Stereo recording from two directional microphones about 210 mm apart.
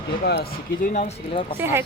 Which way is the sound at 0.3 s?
50° left (ahead or behind).